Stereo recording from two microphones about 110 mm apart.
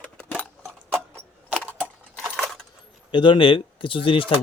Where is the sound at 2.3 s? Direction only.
Centre (ahead or behind).